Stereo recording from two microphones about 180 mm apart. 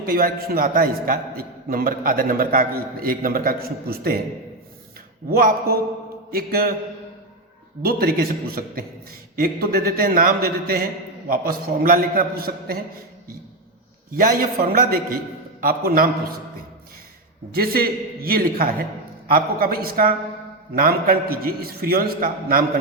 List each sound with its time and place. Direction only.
0.0 s a man's voice: 55° right (ahead or behind)
5.3 s a man's voice: 55° right (ahead or behind)
7.8 s a man's voice: 55° right (ahead or behind)
14.1 s a man's voice: 50° right (ahead or behind)
17.5 s a man's voice: 55° right (ahead or behind)